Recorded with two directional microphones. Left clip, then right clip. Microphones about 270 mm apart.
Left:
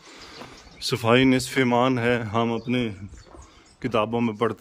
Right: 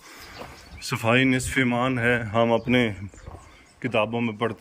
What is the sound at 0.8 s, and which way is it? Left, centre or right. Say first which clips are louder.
Speech: left 2 dB; centre.